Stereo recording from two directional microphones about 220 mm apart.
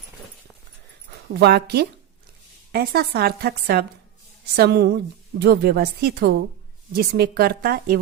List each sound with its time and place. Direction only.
1.3 s speech: 45° right (ahead or behind)